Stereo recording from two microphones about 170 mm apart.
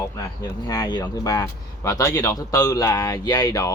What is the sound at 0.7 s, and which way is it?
Speech, 25° left (ahead or behind).